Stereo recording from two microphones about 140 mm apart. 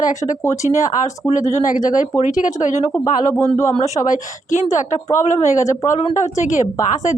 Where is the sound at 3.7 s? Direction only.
60° left (ahead or behind).